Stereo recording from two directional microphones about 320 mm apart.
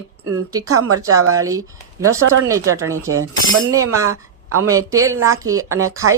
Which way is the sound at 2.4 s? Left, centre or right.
Centre.